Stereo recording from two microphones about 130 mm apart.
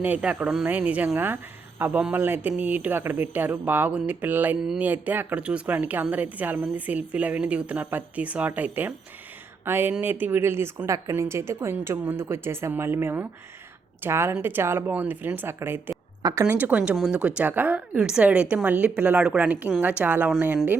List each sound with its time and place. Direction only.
0.0 s a woman's voice: 10° right (ahead or behind)